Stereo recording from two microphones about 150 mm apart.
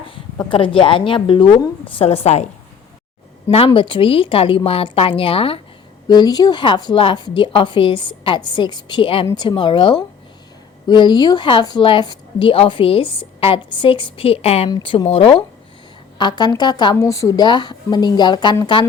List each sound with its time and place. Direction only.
0.1 s a woman's voice: 35° left (ahead or behind)
3.8 s a woman's voice: 35° left (ahead or behind)
6.1 s a woman's voice: 25° left (ahead or behind)